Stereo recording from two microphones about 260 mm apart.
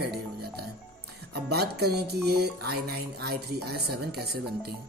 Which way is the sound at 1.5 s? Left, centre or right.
Right.